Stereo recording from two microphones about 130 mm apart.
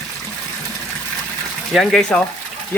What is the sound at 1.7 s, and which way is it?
Speech, 5° left (ahead or behind).